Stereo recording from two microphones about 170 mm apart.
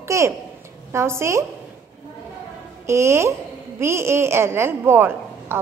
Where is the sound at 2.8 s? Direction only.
15° right (ahead or behind).